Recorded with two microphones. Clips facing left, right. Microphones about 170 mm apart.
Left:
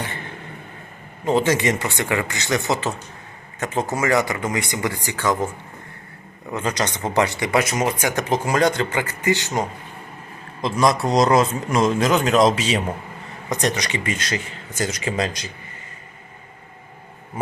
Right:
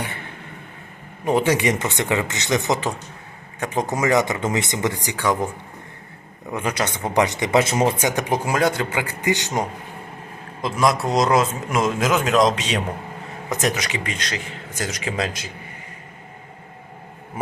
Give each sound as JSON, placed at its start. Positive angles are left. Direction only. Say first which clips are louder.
{"t": 1.2, "sound": "speech", "louder": "even", "side_deg": -15}
{"t": 6.5, "sound": "speech", "louder": "even", "side_deg": -10}
{"t": 8.0, "sound": "speech", "louder": "even", "side_deg": -15}
{"t": 10.6, "sound": "a man's voice", "louder": "left 1 dB", "side_deg": 0}